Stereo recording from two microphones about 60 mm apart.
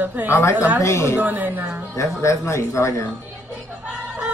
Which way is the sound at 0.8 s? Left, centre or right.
Left.